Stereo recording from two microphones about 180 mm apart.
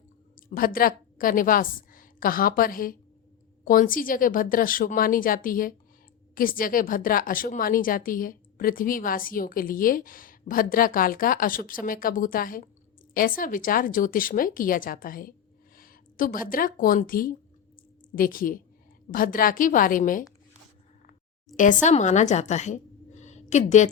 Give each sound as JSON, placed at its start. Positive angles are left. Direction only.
{"t": 0.5, "sound": "a woman's voice", "side_deg": 55}
{"t": 21.5, "sound": "a woman's voice", "side_deg": 45}